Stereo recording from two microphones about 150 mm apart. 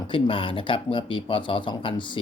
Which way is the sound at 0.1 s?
35° left (ahead or behind).